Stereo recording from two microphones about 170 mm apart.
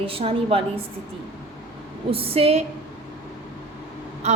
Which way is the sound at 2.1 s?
35° right (ahead or behind).